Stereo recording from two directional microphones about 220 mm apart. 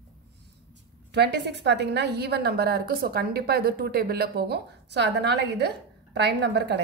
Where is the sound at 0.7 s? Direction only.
50° right (ahead or behind).